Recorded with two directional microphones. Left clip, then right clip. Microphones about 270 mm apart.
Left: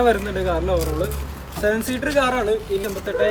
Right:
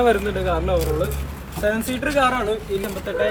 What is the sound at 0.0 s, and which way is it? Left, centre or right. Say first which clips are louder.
Speech: even; centre.